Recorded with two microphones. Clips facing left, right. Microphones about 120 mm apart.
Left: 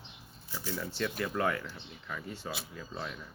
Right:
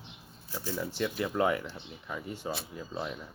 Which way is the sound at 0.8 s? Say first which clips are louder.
Right 3 dB; 15° right (ahead or behind).